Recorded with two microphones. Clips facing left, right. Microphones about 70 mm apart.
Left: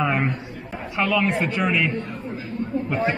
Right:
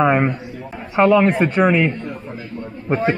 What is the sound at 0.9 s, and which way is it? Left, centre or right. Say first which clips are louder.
A man's voice: right 8 dB; right.